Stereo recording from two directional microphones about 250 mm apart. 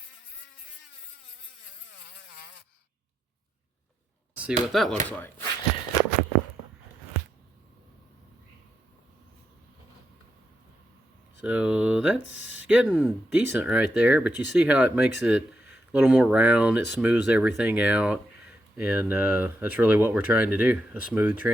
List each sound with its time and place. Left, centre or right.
4.7 s speech: centre
11.4 s speech: centre
12.2 s speech: right
12.6 s speech: centre